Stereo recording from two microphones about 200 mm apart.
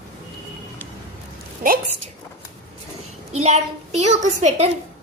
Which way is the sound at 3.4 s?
35° right (ahead or behind).